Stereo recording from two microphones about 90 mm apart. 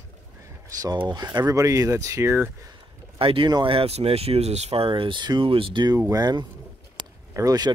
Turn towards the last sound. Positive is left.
turn(degrees=-45)  # may be behind; listen again after turning